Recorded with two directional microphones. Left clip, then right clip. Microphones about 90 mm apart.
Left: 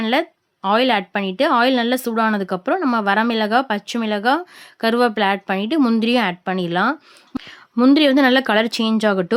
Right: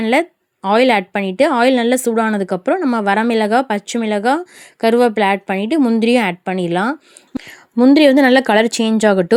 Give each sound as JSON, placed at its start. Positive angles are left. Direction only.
{"t": 0.0, "sound": "speech", "side_deg": -35}
{"t": 2.7, "sound": "speech", "side_deg": -10}
{"t": 3.0, "sound": "speech", "side_deg": -25}
{"t": 7.3, "sound": "speech", "side_deg": 0}
{"t": 7.9, "sound": "a woman's voice", "side_deg": -30}